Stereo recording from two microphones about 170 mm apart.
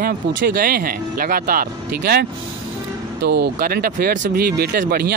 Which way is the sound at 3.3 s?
65° right (ahead or behind).